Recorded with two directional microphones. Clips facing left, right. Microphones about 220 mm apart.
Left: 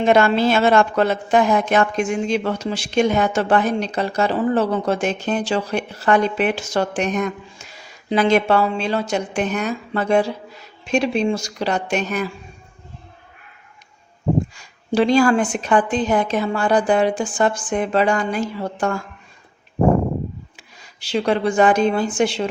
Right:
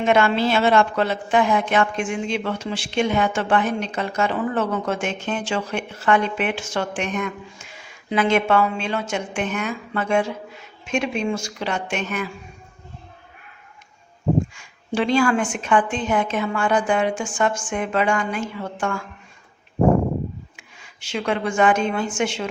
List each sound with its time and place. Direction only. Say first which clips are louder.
0.0 s a woman's voice: left 3 dB; 40° left (ahead or behind)
14.5 s a woman's voice: left 5 dB; 40° left (ahead or behind)
20.6 s speech: left 1 dB; 35° left (ahead or behind)